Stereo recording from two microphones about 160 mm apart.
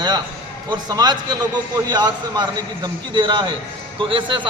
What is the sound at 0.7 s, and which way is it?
A man's voice, 25° right (ahead or behind).